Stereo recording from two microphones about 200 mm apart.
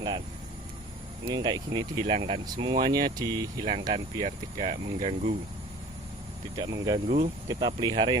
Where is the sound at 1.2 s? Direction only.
20° right (ahead or behind).